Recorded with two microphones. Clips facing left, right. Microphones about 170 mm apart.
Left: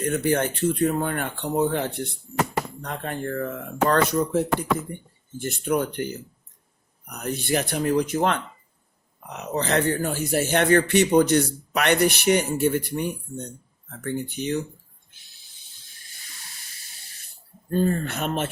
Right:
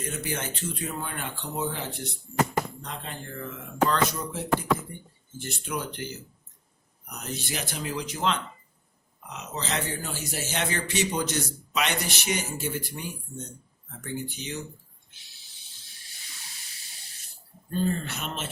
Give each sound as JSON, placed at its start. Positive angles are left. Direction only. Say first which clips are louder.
{"t": 0.0, "sound": "a man's voice", "louder": "left 10 dB", "side_deg": 60}
{"t": 17.7, "sound": "speech", "louder": "left 5 dB", "side_deg": 50}